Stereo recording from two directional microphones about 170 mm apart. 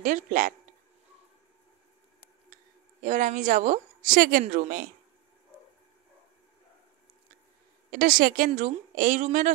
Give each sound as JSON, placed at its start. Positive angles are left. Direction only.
{"t": 0.0, "sound": "a woman's voice", "side_deg": -50}
{"t": 2.5, "sound": "a woman's voice", "side_deg": -50}
{"t": 7.9, "sound": "a woman's voice", "side_deg": -55}